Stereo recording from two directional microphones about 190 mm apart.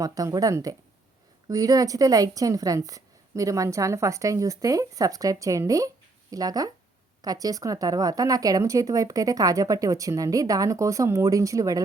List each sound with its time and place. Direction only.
0.0 s speech: 20° right (ahead or behind)